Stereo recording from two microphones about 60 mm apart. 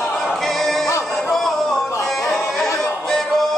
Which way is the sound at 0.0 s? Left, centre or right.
Centre.